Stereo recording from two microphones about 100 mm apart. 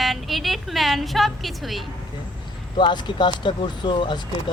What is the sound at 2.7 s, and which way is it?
Speech, 50° left (ahead or behind).